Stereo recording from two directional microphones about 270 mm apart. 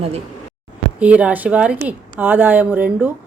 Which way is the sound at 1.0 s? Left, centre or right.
Centre.